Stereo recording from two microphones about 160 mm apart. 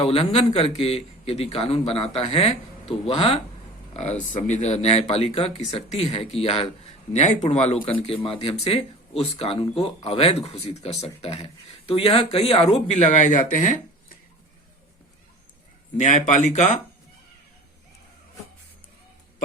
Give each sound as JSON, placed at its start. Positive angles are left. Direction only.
{"t": 0.0, "sound": "speech", "side_deg": 40}
{"t": 16.0, "sound": "speech", "side_deg": 50}